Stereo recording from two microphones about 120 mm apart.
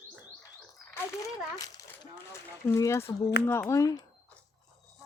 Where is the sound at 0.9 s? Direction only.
30° left (ahead or behind).